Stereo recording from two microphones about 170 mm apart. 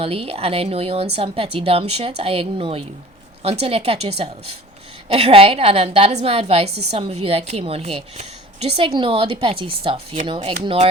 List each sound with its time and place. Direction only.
0.0 s a woman's voice: 35° right (ahead or behind)